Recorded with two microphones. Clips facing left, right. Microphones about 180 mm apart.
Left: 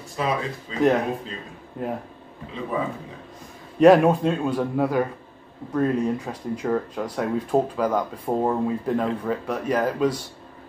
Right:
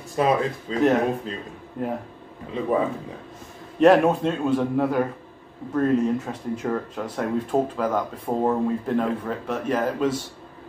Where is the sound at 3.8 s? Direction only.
5° left (ahead or behind).